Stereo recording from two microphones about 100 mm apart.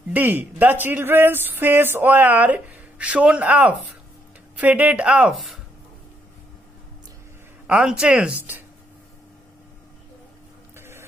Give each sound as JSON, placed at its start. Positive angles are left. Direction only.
{"t": 0.1, "sound": "speech", "side_deg": -15}
{"t": 5.3, "sound": "speech", "side_deg": 0}
{"t": 7.6, "sound": "speech", "side_deg": -10}
{"t": 10.8, "sound": "a sound", "side_deg": -25}